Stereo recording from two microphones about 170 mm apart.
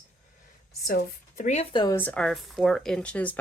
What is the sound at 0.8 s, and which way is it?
Speech, 50° left (ahead or behind).